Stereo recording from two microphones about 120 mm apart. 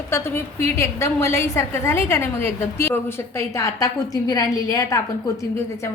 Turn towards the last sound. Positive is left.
turn(degrees=30)  # may be behind; listen again after turning